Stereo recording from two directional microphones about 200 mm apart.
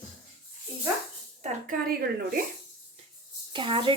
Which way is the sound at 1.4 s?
40° right (ahead or behind).